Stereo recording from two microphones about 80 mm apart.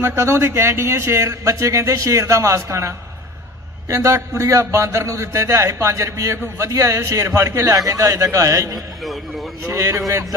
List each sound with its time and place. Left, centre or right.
0.0 s a man's voice: right
4.1 s a man's voice: right
4.5 s a man's voice: right
7.7 s a man's voice: right